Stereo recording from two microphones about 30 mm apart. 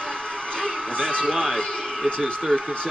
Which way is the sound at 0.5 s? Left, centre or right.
Left.